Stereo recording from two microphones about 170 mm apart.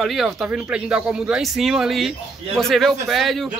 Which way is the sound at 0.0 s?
Centre (ahead or behind).